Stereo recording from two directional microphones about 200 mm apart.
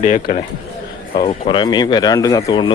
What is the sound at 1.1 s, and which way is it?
Speech, 25° left (ahead or behind).